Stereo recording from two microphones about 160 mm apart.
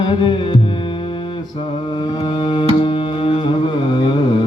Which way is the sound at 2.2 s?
35° left (ahead or behind).